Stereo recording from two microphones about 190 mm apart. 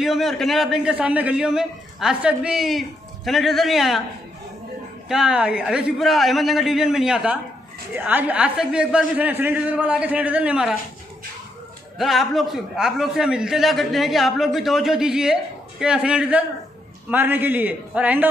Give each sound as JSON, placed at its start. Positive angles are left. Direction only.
{"t": 0.0, "sound": "a man's voice", "side_deg": 0}
{"t": 5.0, "sound": "a man's voice", "side_deg": -5}
{"t": 12.0, "sound": "a man's voice", "side_deg": 0}